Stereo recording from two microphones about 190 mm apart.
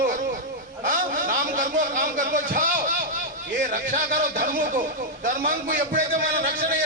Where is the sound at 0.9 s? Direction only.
45° right (ahead or behind).